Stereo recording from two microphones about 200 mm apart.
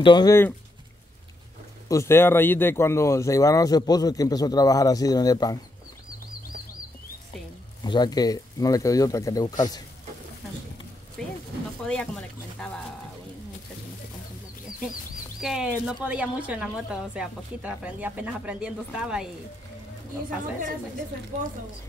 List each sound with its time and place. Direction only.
0.0 s speech: 20° left (ahead or behind)
1.9 s speech: 15° left (ahead or behind)
7.8 s speech: 20° left (ahead or behind)
11.2 s a woman's voice: 5° left (ahead or behind)
15.4 s a woman's voice: 5° right (ahead or behind)